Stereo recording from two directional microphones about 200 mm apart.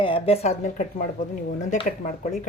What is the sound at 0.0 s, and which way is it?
Speech, 30° left (ahead or behind).